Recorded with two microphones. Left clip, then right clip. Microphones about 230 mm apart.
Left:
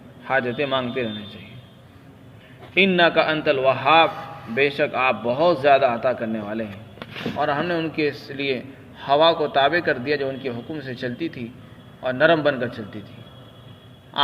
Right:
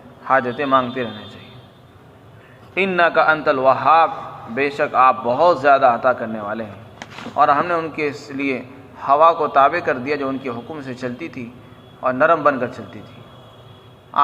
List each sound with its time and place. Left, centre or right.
0.3 s a man's voice: left
2.7 s a man's voice: left
12.0 s a man's voice: left